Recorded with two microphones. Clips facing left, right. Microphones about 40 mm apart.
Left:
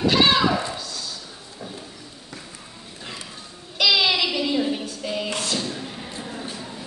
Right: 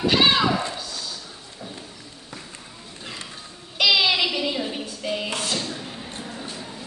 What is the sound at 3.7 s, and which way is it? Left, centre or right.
Music, centre.